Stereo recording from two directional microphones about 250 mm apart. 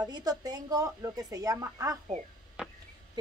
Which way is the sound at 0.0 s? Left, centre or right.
Centre.